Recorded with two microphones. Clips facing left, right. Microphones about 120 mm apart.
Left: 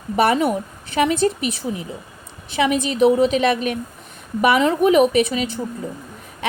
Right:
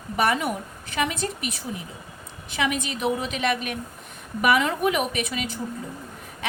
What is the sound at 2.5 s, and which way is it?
A woman's voice, 30° left (ahead or behind).